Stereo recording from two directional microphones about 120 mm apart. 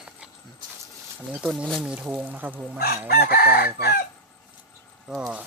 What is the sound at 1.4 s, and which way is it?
Speech, 5° right (ahead or behind).